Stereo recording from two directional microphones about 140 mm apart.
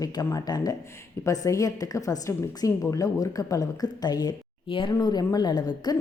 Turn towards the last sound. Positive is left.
turn(degrees=30)  # may be behind; listen again after turning